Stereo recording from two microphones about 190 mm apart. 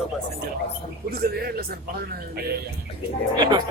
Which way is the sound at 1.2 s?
55° right (ahead or behind).